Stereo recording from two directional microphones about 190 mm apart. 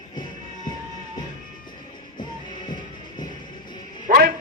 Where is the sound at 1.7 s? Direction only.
25° left (ahead or behind).